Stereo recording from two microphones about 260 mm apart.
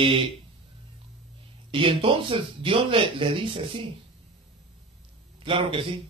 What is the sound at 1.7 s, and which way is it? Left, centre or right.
Speech, centre.